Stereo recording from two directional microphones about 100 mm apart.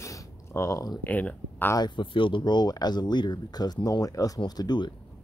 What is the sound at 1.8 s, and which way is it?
Speech, 50° left (ahead or behind).